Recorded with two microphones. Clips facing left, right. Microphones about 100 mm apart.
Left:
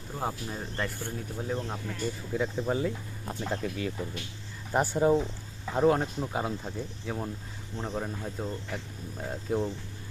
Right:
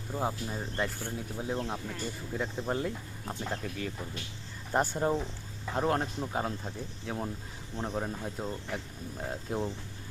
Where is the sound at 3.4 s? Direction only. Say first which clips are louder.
Left 4 dB; 15° left (ahead or behind).